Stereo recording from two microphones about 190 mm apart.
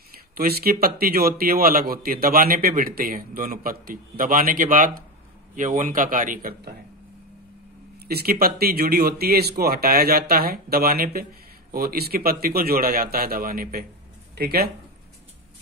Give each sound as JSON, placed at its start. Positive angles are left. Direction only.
{"t": 0.3, "sound": "a man's voice", "side_deg": -50}
{"t": 8.1, "sound": "a man's voice", "side_deg": -55}